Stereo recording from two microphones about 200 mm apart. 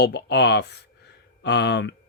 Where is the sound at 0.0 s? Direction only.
60° left (ahead or behind).